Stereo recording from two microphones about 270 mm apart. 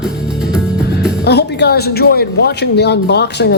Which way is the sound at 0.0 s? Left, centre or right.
Centre.